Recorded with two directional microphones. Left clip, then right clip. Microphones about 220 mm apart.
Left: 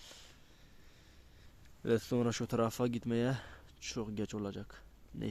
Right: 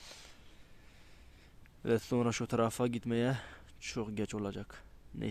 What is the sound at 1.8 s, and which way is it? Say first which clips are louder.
Speech: right 1 dB; centre (ahead or behind).